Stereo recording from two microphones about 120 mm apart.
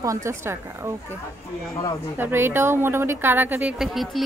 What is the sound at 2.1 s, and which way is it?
A woman's voice, 15° right (ahead or behind).